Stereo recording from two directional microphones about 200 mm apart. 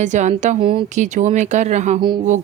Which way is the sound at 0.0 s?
35° right (ahead or behind).